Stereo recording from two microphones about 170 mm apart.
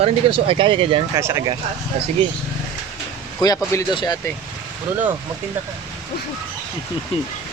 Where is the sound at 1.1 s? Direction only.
15° right (ahead or behind).